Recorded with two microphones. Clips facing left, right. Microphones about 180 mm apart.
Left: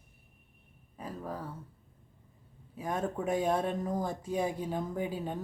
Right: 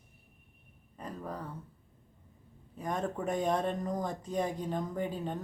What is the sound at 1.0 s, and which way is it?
Speech, 5° left (ahead or behind).